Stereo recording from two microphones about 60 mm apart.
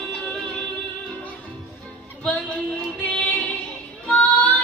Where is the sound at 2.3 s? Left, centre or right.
Centre.